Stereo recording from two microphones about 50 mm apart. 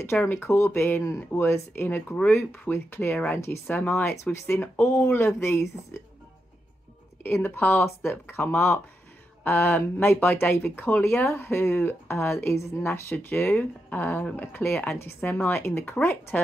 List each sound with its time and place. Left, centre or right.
0.3 s speech: left
1.0 s speech: left
1.4 s speech: left
3.3 s speech: left
3.7 s speech: left
4.2 s speech: left
7.2 s speech: left
13.1 s speech: left
15.2 s speech: left
15.5 s speech: left